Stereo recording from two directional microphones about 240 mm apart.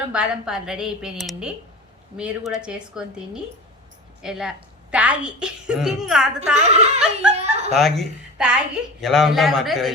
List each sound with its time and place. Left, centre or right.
0.1 s a woman's voice: centre
6.6 s speech: right
7.0 s a woman's voice: centre
7.3 s a sound: right
7.8 s a woman's voice: centre